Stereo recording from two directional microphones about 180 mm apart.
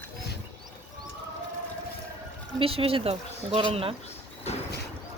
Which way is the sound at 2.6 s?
30° right (ahead or behind).